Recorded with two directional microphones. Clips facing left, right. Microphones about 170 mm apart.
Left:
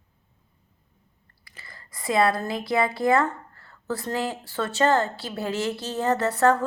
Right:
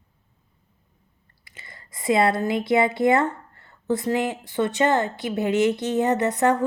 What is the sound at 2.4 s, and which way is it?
A woman's voice, 25° right (ahead or behind).